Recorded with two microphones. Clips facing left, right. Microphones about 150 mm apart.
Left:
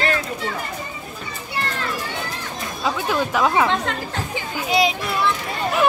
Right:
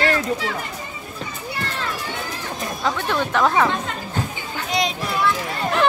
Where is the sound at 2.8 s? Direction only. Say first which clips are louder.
Left 1 dB; 5° left (ahead or behind).